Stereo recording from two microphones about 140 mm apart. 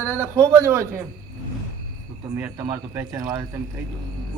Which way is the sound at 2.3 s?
15° right (ahead or behind).